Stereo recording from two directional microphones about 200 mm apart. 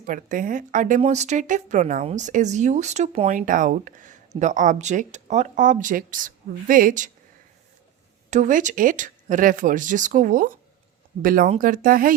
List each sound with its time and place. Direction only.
0.0 s speech: 40° right (ahead or behind)
8.3 s speech: 40° right (ahead or behind)